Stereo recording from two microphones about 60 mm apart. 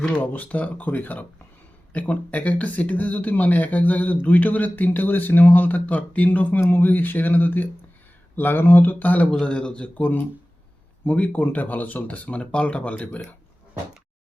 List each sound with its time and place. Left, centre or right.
0.1 s speech: left
9.3 s a man's voice: centre
11.0 s speech: left